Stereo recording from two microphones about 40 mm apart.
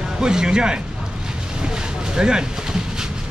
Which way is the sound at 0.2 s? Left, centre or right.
Centre.